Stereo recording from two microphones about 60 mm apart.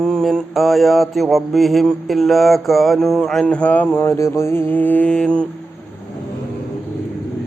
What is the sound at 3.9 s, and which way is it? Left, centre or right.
Mantra, left.